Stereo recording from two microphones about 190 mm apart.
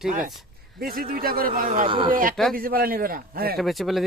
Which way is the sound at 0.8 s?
50° right (ahead or behind).